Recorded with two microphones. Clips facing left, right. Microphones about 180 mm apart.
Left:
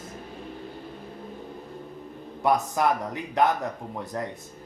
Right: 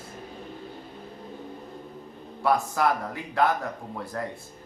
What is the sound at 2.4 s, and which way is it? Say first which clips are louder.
Speech: left 1 dB; 20° left (ahead or behind).